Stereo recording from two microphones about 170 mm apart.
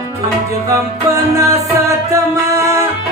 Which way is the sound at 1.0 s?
20° right (ahead or behind).